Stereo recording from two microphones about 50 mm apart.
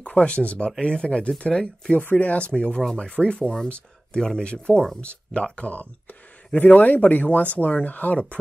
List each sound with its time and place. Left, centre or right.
0.0 s speech: left
2.0 s speech: left; by 3.1 s centre
3.1 s speech: left
3.3 s speech: centre; by 8.4 s left